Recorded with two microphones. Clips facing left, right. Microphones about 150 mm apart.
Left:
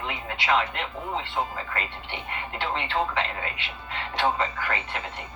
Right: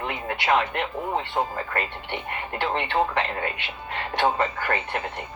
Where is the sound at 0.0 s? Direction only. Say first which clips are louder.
Right 3 dB; 55° right (ahead or behind).